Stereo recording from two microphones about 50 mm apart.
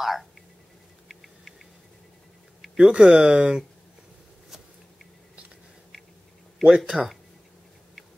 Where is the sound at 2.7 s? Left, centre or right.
Right.